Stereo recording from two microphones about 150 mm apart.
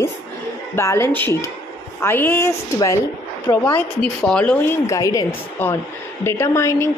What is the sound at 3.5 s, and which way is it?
Speech, 15° left (ahead or behind).